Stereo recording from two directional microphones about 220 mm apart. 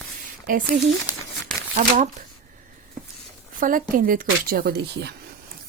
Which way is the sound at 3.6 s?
40° right (ahead or behind).